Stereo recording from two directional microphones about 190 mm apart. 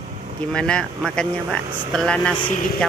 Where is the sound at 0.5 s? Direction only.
5° left (ahead or behind).